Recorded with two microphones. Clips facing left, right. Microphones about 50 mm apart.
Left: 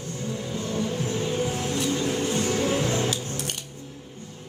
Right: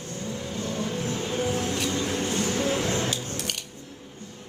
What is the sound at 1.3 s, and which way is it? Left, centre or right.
Vehicle, right.